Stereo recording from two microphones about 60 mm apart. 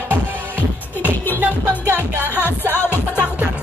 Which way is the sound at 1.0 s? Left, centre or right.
Right.